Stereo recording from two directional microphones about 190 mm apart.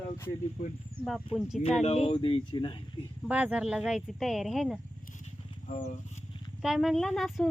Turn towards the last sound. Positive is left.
turn(degrees=0)  # may be behind; listen again after turning